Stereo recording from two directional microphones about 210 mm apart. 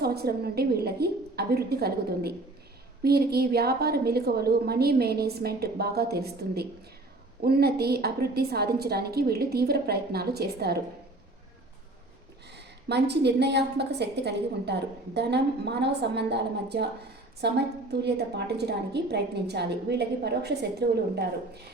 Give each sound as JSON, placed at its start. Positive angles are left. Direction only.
{"t": 0.0, "sound": "a woman's voice", "side_deg": -50}
{"t": 12.9, "sound": "a woman's voice", "side_deg": -55}